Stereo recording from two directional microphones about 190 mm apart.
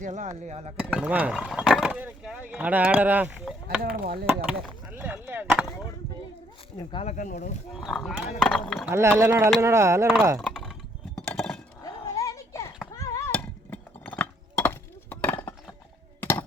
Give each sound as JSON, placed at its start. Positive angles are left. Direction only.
{"t": 0.0, "sound": "speech", "side_deg": -40}
{"t": 0.8, "sound": "speech", "side_deg": -5}
{"t": 3.8, "sound": "speech", "side_deg": -50}
{"t": 4.4, "sound": "chop", "side_deg": -5}
{"t": 7.0, "sound": "speech", "side_deg": 40}
{"t": 7.7, "sound": "speech", "side_deg": 0}
{"t": 8.9, "sound": "speech", "side_deg": -15}
{"t": 10.4, "sound": "a sound", "side_deg": 0}
{"t": 11.2, "sound": "chink", "side_deg": 5}
{"t": 11.8, "sound": "horse", "side_deg": 15}
{"t": 13.0, "sound": "a sound", "side_deg": 15}